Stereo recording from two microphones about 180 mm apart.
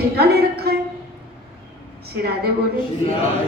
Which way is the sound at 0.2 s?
60° right (ahead or behind).